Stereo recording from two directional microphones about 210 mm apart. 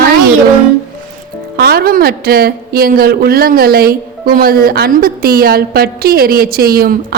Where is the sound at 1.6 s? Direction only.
50° right (ahead or behind).